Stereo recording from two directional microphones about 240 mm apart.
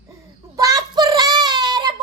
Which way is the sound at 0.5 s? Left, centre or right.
Centre.